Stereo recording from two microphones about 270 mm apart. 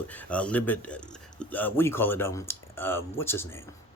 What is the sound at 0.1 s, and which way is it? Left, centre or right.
Speech, centre.